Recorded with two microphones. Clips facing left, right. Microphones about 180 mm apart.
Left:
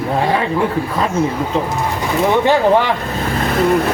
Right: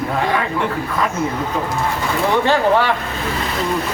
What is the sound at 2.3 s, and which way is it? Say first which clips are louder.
Speech: left 3 dB; 15° left (ahead or behind).